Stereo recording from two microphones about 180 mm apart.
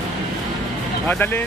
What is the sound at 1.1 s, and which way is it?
Music, 10° left (ahead or behind).